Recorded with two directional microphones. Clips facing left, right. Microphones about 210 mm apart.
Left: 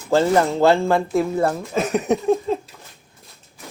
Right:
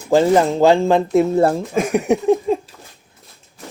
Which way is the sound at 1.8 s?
10° right (ahead or behind).